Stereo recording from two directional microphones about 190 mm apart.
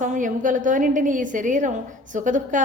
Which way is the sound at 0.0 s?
40° right (ahead or behind).